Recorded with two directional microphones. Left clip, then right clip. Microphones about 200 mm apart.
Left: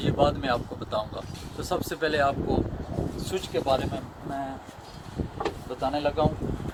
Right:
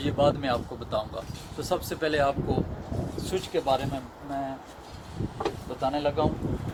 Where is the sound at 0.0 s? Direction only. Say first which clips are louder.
Even; 10° right (ahead or behind).